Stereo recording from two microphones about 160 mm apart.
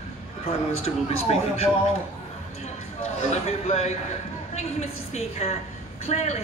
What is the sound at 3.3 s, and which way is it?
Speech, 40° left (ahead or behind).